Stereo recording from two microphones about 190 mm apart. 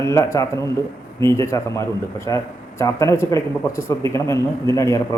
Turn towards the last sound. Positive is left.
turn(degrees=15)  # may be behind; listen again after turning